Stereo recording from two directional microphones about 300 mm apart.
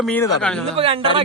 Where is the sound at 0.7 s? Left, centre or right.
Centre.